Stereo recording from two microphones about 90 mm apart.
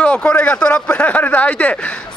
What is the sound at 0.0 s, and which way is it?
Speech, 10° left (ahead or behind).